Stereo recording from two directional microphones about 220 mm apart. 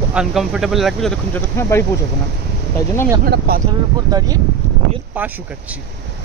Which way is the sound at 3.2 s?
45° right (ahead or behind).